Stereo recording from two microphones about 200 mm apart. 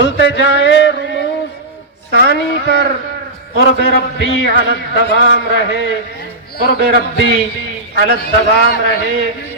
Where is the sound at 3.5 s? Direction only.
50° right (ahead or behind).